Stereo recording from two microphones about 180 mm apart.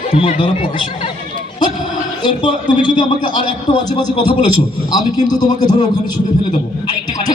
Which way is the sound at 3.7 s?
25° left (ahead or behind).